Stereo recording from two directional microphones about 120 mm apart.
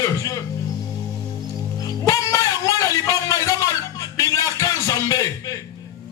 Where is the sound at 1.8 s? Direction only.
30° left (ahead or behind).